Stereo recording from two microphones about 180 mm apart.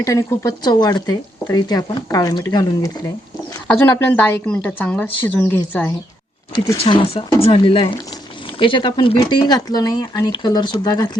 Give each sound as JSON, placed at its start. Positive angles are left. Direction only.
{"t": 0.0, "sound": "speech", "side_deg": 15}
{"t": 3.7, "sound": "a woman's voice", "side_deg": 10}
{"t": 6.7, "sound": "speech", "side_deg": 30}